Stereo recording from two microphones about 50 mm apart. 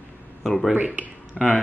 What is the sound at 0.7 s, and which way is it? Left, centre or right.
Speech, right.